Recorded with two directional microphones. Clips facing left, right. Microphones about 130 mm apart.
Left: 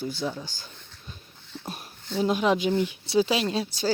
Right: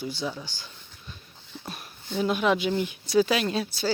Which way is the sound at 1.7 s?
40° left (ahead or behind).